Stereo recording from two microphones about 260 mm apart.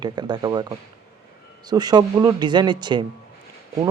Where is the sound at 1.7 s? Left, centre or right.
Centre.